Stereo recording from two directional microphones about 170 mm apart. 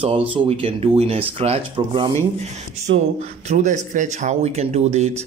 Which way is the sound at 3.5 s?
45° right (ahead or behind).